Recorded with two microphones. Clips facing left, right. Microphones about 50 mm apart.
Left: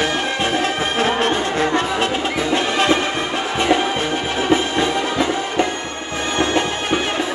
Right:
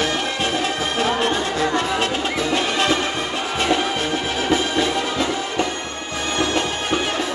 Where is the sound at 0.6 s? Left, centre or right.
Left.